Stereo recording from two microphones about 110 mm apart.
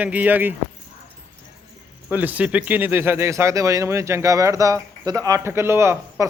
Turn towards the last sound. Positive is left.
turn(degrees=-25)  # may be behind; listen again after turning